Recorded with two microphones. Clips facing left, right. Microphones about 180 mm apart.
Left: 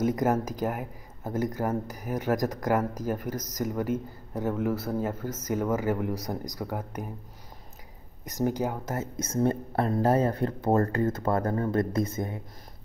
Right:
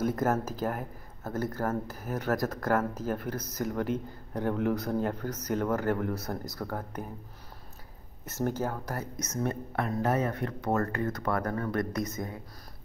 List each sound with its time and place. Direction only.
0.0 s speech: 15° left (ahead or behind)
8.3 s speech: 15° left (ahead or behind)